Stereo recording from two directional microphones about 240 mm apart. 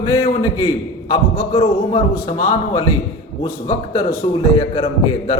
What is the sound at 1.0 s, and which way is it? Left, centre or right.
A man's voice, left.